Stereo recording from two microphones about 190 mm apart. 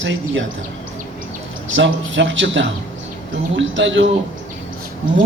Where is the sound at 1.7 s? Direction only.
75° right (ahead or behind).